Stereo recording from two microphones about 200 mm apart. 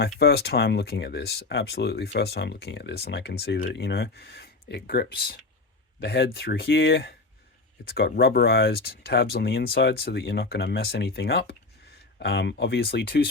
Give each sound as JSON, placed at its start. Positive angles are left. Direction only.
{"t": 0.0, "sound": "speech", "side_deg": 55}